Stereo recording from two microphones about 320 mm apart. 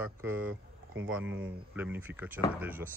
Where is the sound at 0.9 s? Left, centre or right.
Right.